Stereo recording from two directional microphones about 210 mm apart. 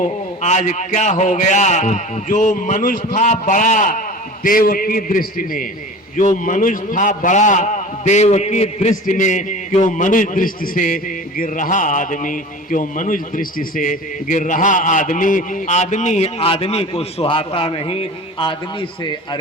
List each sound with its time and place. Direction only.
0.4 s a man's voice: 35° left (ahead or behind)